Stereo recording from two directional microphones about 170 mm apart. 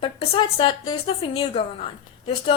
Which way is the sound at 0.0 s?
35° left (ahead or behind).